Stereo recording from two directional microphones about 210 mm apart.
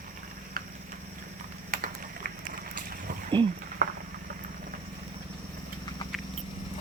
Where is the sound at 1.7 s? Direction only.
40° right (ahead or behind).